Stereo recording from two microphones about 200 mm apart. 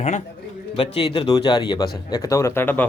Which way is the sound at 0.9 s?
25° left (ahead or behind).